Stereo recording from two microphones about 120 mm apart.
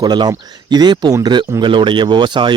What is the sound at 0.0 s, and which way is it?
Speech, 35° right (ahead or behind).